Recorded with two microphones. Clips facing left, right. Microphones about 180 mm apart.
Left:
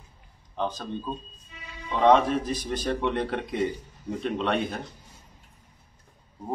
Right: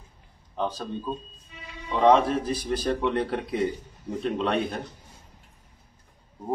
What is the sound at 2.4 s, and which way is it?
Speech, 35° right (ahead or behind).